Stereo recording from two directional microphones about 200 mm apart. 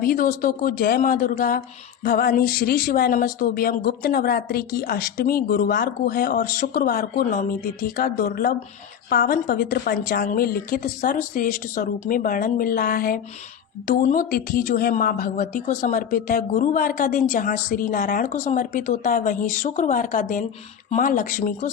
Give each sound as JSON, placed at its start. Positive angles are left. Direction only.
{"t": 0.0, "sound": "a woman's voice", "side_deg": 45}